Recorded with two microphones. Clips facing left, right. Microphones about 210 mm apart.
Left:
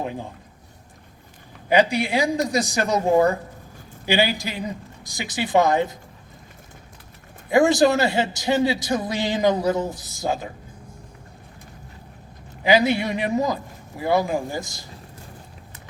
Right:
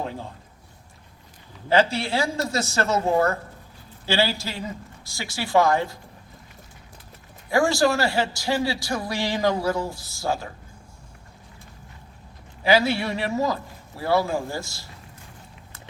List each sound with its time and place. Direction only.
0.0 s a man's voice: 15° left (ahead or behind)
1.7 s speech: 15° left (ahead or behind)
7.5 s a man's voice: 20° left (ahead or behind)
12.6 s speech: 20° left (ahead or behind)